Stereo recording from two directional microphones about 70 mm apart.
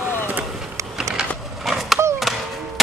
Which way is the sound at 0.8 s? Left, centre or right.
Right.